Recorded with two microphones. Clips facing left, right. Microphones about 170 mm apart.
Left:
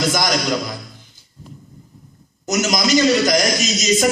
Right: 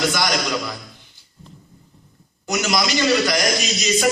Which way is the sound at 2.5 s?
45° left (ahead or behind).